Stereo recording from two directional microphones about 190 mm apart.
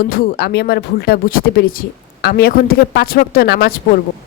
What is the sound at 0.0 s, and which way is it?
Speech, 50° left (ahead or behind).